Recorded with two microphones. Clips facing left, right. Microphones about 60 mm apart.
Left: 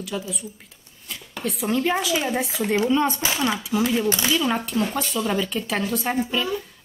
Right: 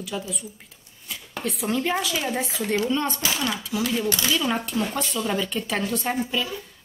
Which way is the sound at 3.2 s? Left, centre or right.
Left.